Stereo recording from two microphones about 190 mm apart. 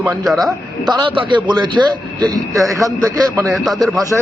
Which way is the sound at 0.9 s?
25° right (ahead or behind).